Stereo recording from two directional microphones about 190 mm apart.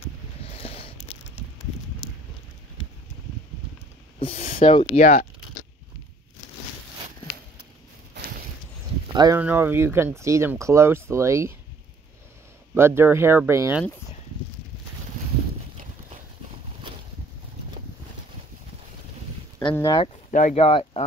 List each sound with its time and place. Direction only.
0.4 s a sound: 30° left (ahead or behind)
4.2 s speech: 35° left (ahead or behind)
4.9 s speech: 50° left (ahead or behind)
9.1 s speech: 20° right (ahead or behind)
9.4 s speech: 10° right (ahead or behind)
12.7 s speech: 10° right (ahead or behind)
19.7 s speech: 15° left (ahead or behind)
20.2 s speech: 40° left (ahead or behind)